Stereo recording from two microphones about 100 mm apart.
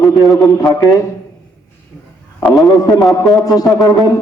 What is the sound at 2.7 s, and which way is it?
Speech, 40° left (ahead or behind).